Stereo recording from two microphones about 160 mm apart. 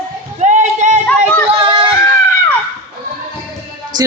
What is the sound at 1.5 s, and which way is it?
Child singing, 30° right (ahead or behind).